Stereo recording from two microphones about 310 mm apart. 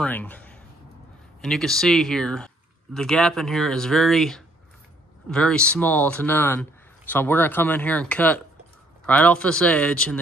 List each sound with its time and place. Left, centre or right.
0.0 s speech: centre